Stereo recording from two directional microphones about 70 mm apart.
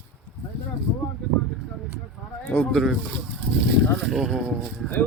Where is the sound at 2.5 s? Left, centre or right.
Left.